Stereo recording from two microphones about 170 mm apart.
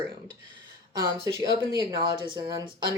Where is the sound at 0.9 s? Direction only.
25° right (ahead or behind).